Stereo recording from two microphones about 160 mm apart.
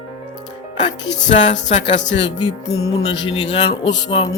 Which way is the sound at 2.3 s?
25° left (ahead or behind).